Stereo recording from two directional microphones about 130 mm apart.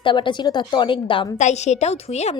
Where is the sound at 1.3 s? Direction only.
60° left (ahead or behind).